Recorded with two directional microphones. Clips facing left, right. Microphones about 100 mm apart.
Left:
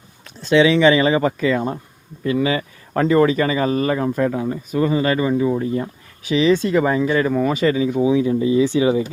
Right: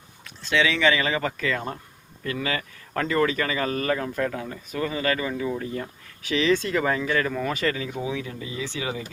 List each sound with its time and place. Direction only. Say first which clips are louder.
0.5 s speech: left 9 dB; 25° left (ahead or behind)